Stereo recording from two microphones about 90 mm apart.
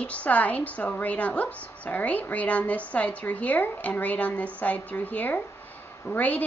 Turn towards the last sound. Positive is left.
turn(degrees=20)  # may be behind; listen again after turning